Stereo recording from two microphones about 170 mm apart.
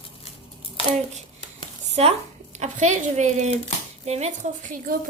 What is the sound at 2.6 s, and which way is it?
A woman's voice, 45° right (ahead or behind).